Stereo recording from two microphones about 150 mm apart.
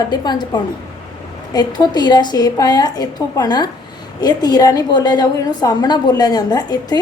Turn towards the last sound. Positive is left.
turn(degrees=25)  # may be behind; listen again after turning